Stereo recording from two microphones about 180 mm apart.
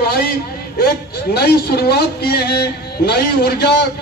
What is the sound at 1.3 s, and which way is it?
A man's voice, 60° left (ahead or behind).